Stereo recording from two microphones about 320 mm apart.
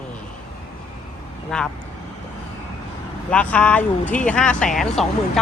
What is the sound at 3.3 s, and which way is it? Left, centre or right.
Speech, centre.